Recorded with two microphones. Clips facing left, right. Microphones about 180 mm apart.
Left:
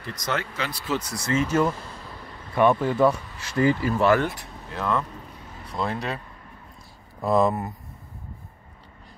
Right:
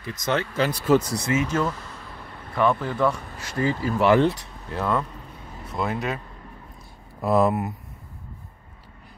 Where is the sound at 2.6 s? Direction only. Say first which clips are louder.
Left 3 dB; 20° left (ahead or behind).